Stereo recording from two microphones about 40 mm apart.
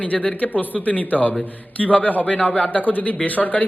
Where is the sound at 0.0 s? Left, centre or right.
Left.